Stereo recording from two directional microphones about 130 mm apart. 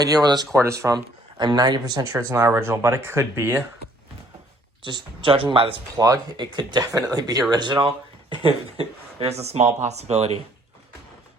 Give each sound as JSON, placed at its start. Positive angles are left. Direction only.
{"t": 0.0, "sound": "speech", "side_deg": -30}
{"t": 4.8, "sound": "speech", "side_deg": -40}
{"t": 6.0, "sound": "speech", "side_deg": -30}